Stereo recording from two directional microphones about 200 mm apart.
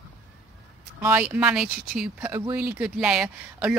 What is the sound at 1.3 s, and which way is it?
A woman's voice, 5° right (ahead or behind).